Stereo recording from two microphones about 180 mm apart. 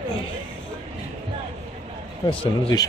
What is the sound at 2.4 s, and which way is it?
Speech, 30° left (ahead or behind).